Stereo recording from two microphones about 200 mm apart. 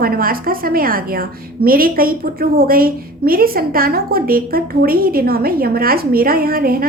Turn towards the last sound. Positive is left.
turn(degrees=-45)  # may be behind; listen again after turning